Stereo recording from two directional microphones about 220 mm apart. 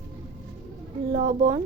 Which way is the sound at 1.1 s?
35° right (ahead or behind).